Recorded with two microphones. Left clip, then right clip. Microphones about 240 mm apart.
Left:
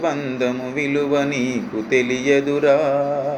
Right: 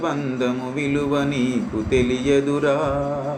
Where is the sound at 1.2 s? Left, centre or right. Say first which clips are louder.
Left 1 dB; centre.